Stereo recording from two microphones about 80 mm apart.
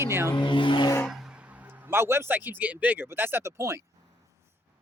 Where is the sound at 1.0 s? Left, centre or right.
Centre.